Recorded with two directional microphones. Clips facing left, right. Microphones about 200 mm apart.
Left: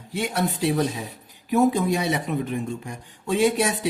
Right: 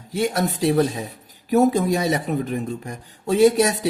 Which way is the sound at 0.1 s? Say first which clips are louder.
Right 3 dB; 40° right (ahead or behind).